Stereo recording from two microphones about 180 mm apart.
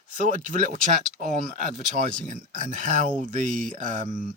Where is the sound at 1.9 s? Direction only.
45° right (ahead or behind).